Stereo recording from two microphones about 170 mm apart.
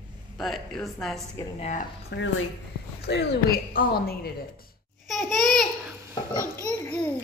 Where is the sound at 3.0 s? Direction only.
70° left (ahead or behind).